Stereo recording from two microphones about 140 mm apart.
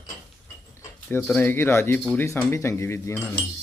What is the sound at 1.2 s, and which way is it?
Speech, 15° left (ahead or behind).